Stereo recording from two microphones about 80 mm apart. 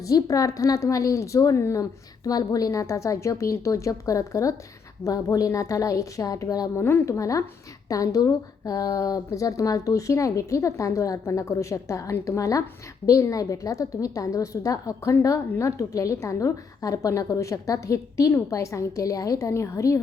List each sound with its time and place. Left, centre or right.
0.0 s a woman's voice: left
6.7 s a woman's voice: left